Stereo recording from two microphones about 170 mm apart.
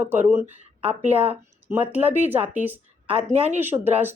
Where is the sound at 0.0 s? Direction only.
10° right (ahead or behind).